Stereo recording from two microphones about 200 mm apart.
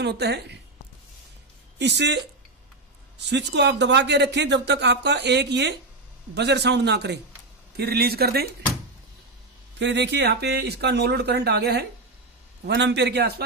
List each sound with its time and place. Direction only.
0.0 s speech: 55° right (ahead or behind)
1.8 s speech: 60° right (ahead or behind)
3.3 s speech: 60° right (ahead or behind)
9.8 s speech: 60° right (ahead or behind)